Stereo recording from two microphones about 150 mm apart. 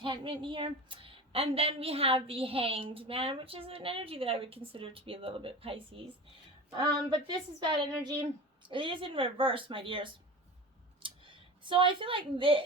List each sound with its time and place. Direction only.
0.0 s a woman's voice: 35° right (ahead or behind)